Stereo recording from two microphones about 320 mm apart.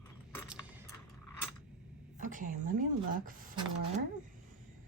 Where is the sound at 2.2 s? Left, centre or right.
Right.